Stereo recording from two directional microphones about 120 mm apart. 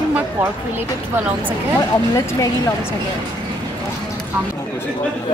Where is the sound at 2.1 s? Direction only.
30° left (ahead or behind).